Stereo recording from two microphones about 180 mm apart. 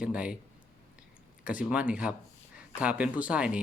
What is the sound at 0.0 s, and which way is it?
Speech, 5° right (ahead or behind).